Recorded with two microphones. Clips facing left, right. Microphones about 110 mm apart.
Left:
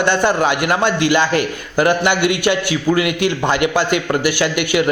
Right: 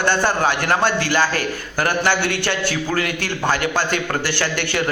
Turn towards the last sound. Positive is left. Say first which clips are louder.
# left 6 dB
turn(degrees=15)  # may be behind; listen again after turning